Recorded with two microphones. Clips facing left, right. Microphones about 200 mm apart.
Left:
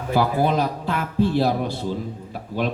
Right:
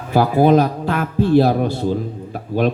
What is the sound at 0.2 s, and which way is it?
A man's voice, 55° right (ahead or behind).